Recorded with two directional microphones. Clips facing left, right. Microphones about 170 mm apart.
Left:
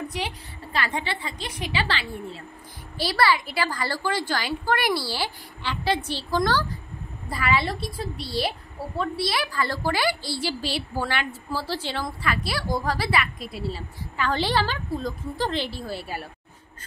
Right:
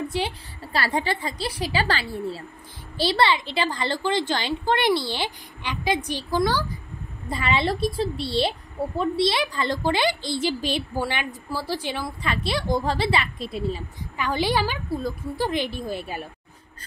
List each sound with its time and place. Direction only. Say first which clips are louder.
0.1 s a woman's voice: right 4 dB; 30° right (ahead or behind); by 6.8 s 10° right (ahead or behind)
7.2 s a woman's voice: right 1 dB; 25° right (ahead or behind)
12.3 s speech: right 3 dB; 25° right (ahead or behind)